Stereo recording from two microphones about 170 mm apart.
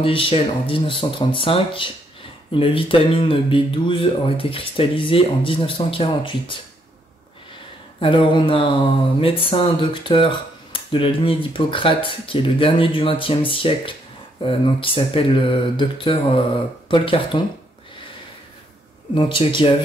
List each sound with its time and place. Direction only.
0.0 s speech: 30° left (ahead or behind)
8.0 s speech: 30° left (ahead or behind)
19.1 s speech: 30° left (ahead or behind)